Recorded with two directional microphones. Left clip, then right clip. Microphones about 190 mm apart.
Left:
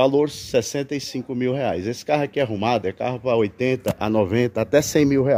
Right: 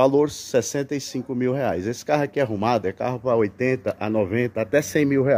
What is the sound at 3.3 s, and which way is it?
Speech, 25° left (ahead or behind).